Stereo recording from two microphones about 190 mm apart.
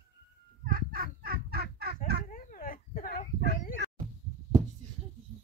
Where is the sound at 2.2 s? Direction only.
45° left (ahead or behind).